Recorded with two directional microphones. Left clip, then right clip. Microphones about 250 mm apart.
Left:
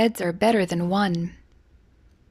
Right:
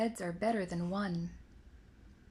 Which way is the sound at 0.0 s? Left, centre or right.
Left.